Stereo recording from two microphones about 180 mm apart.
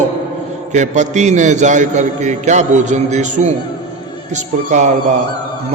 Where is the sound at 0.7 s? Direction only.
40° right (ahead or behind).